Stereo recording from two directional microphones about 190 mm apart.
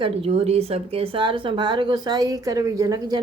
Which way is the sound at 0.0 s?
30° right (ahead or behind).